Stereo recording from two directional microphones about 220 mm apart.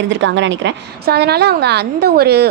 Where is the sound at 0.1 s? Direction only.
55° right (ahead or behind).